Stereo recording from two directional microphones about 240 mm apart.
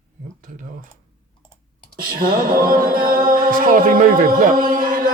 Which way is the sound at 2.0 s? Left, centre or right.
Right.